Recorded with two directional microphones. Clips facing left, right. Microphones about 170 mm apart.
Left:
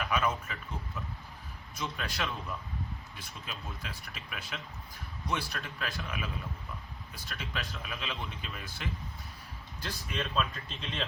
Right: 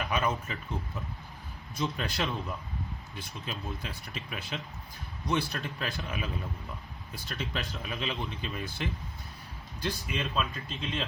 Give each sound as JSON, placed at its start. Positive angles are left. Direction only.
{"t": 0.1, "sound": "speech", "side_deg": -25}
{"t": 1.8, "sound": "speech", "side_deg": -25}
{"t": 7.3, "sound": "speech", "side_deg": -35}
{"t": 10.1, "sound": "speech", "side_deg": -5}